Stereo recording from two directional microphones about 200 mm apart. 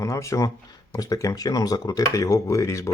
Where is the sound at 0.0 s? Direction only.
15° left (ahead or behind).